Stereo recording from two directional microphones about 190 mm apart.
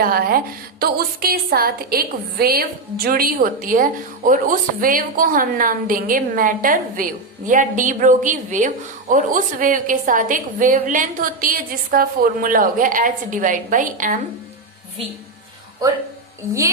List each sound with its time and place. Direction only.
0.0 s a woman's voice: 50° right (ahead or behind)